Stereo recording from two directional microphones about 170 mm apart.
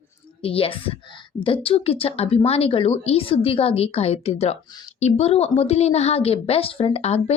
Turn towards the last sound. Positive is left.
turn(degrees=40)  # may be behind; listen again after turning